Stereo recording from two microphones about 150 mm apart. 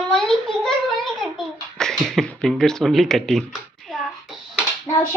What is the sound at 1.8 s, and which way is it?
Speech, 5° left (ahead or behind).